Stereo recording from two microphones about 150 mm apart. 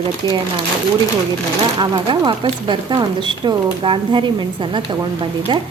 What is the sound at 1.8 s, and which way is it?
Speech, 30° right (ahead or behind).